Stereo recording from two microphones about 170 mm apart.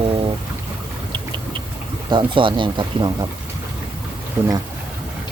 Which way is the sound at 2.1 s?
30° right (ahead or behind).